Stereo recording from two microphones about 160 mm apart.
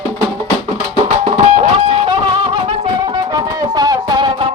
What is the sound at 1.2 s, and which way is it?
Music, 45° right (ahead or behind).